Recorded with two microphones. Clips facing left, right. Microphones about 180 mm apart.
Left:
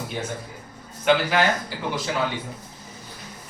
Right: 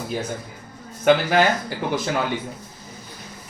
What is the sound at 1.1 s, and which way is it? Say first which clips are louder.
Speech: right 3 dB; 50° right (ahead or behind).